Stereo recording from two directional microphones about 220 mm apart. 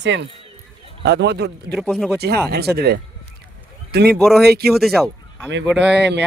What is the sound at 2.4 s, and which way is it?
Speech, 45° right (ahead or behind).